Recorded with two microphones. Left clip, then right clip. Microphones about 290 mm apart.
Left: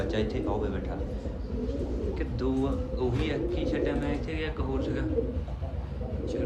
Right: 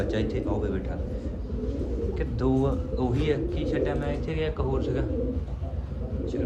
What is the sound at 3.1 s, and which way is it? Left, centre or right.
Speech, centre.